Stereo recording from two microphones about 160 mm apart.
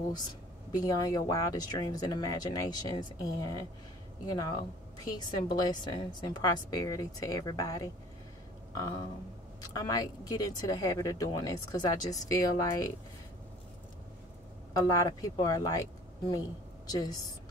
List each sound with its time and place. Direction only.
0.1 s a woman's voice: 25° left (ahead or behind)
9.6 s a woman's voice: 25° left (ahead or behind)
14.7 s speech: 20° left (ahead or behind)